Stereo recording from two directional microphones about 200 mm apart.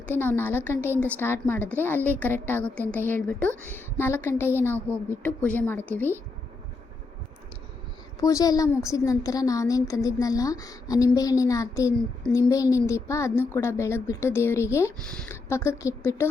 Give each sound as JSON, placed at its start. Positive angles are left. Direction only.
{"t": 0.2, "sound": "a woman's voice", "side_deg": 10}
{"t": 8.2, "sound": "a woman's voice", "side_deg": 15}